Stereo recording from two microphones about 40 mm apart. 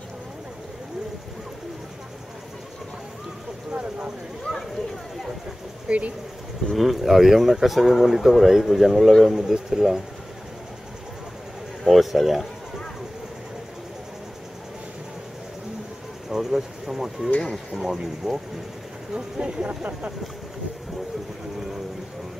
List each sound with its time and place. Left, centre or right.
4.5 s a sound: centre
5.9 s speech: right
6.7 s speech: centre
11.8 s speech: centre
16.3 s speech: centre
17.4 s speech: centre
17.8 s speech: centre
19.1 s speech: right